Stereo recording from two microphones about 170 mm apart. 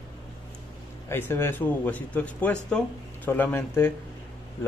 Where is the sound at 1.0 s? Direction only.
15° left (ahead or behind).